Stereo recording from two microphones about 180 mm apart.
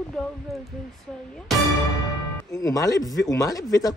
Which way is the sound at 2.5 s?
20° left (ahead or behind).